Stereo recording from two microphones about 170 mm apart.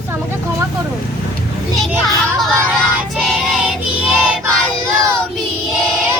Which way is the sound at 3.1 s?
Centre (ahead or behind).